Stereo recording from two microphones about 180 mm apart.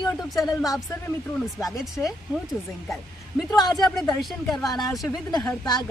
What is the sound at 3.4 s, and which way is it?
Speech, 20° left (ahead or behind).